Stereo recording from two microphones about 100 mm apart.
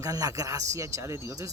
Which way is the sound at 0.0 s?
35° right (ahead or behind).